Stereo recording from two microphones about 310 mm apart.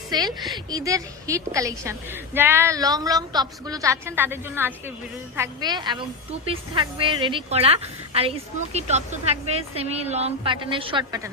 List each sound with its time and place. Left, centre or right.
0.1 s a woman's voice: centre
0.3 s a woman's voice: centre
0.7 s a woman's voice: centre